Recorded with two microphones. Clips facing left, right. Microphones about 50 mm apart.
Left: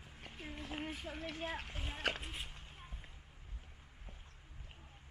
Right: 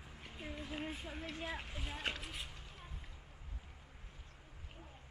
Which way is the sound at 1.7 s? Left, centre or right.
Centre.